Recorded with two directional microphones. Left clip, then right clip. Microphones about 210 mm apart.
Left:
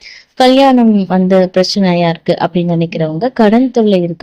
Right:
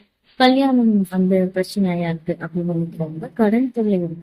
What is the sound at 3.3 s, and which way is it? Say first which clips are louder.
Speech: left 8 dB; 35° left (ahead or behind).